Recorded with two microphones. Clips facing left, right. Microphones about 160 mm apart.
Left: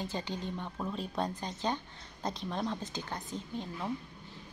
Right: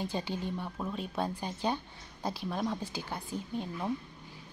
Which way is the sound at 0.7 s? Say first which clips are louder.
Left 2 dB; centre (ahead or behind).